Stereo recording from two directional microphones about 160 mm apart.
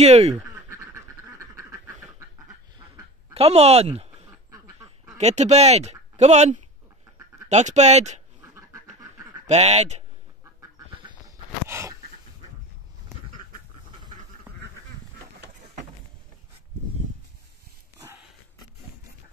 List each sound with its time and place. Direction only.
0.0 s speech: 45° right (ahead or behind)
0.4 s duck: 15° right (ahead or behind)
3.3 s speech: 40° right (ahead or behind)
4.5 s duck: 20° right (ahead or behind)
5.1 s speech: 45° right (ahead or behind)
8.4 s duck: 20° right (ahead or behind)
9.5 s speech: 45° right (ahead or behind)
11.0 s a sound: 30° right (ahead or behind)
11.6 s pant: 20° right (ahead or behind)